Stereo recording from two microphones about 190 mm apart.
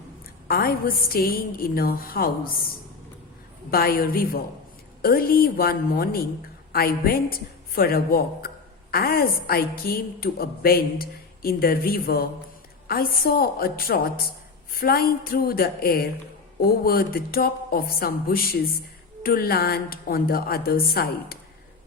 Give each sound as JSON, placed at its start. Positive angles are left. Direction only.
{"t": 0.4, "sound": "a woman's voice", "side_deg": 55}
{"t": 3.7, "sound": "a woman's voice", "side_deg": 50}